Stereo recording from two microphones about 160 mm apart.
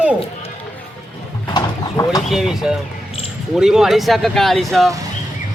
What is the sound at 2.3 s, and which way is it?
A man's voice, centre (ahead or behind).